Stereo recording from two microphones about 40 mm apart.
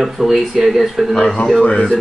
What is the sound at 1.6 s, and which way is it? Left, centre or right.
Speech, left.